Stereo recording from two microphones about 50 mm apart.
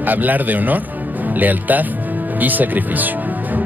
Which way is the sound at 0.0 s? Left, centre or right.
Right.